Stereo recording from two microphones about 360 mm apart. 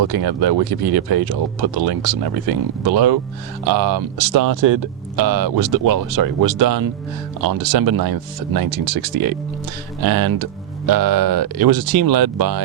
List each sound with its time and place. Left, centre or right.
0.0 s speech: right